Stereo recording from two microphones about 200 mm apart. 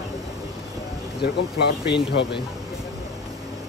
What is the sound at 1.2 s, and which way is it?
Speech, 60° left (ahead or behind).